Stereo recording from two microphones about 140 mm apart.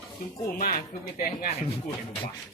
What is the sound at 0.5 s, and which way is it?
Speech, 90° left.